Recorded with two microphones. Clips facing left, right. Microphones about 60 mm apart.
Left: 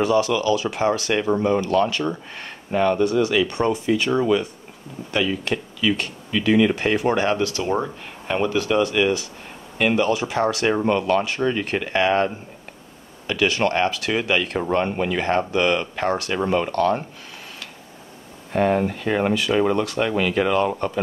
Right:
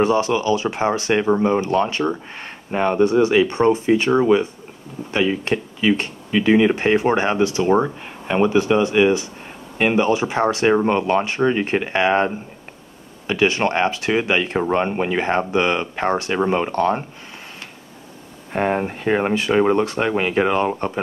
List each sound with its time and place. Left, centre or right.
0.0 s speech: right
18.5 s speech: right